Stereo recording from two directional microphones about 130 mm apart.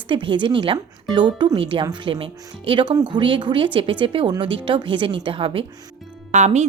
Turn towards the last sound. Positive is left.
turn(degrees=-60)  # may be behind; listen again after turning